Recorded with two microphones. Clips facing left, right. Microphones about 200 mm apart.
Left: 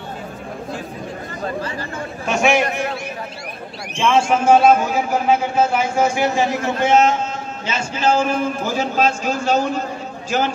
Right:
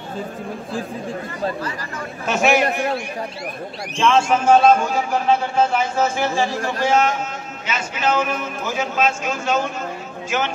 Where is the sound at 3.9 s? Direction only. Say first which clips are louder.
Even; 10° left (ahead or behind).